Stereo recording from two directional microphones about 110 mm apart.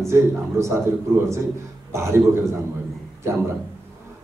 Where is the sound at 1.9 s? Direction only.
25° right (ahead or behind).